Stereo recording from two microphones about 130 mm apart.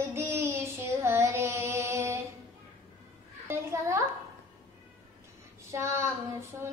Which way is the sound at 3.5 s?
20° right (ahead or behind).